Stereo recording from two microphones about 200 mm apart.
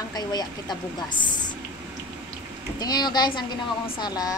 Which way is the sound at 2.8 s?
20° left (ahead or behind).